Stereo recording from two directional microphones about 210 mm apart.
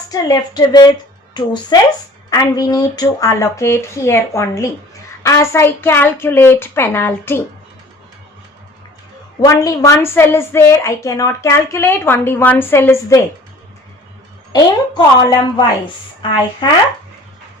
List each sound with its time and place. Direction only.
0.1 s a woman's voice: 20° left (ahead or behind)
9.4 s a woman's voice: 15° left (ahead or behind)
14.5 s a woman's voice: 20° left (ahead or behind)